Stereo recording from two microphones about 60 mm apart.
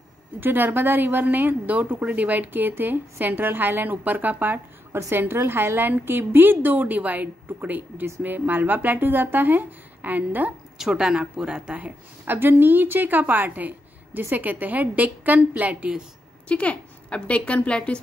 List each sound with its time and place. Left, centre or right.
0.4 s a woman's voice: right
10.8 s speech: centre
12.3 s a woman's voice: right
16.4 s a woman's voice: left